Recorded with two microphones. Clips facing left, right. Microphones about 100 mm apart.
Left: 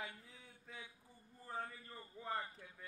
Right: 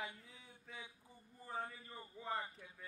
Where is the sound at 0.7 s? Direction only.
Centre (ahead or behind).